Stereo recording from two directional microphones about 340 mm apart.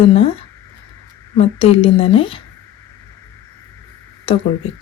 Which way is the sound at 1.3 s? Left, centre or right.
Centre.